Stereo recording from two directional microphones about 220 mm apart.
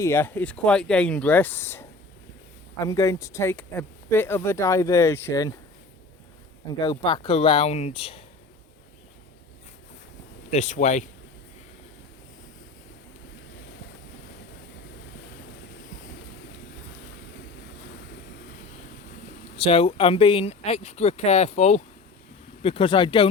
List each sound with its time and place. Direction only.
0.0 s speech: 10° left (ahead or behind)
2.8 s speech: 15° left (ahead or behind)
6.8 s speech: 20° left (ahead or behind)
10.5 s speech: 35° left (ahead or behind)
19.6 s speech: 25° left (ahead or behind)